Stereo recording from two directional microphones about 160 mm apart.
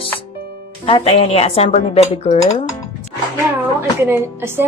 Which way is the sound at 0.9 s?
35° left (ahead or behind).